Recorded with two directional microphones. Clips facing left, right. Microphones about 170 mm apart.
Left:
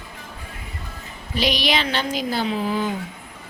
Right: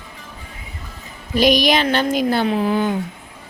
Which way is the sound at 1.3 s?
45° right (ahead or behind).